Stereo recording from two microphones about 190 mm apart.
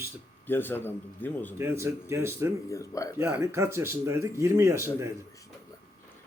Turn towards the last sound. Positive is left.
turn(degrees=-15)  # may be behind; listen again after turning